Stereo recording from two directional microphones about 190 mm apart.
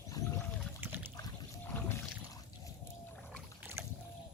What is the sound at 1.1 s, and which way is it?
Boat, 20° left (ahead or behind).